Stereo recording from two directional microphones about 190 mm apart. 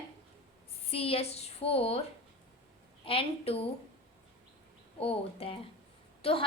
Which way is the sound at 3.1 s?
30° left (ahead or behind).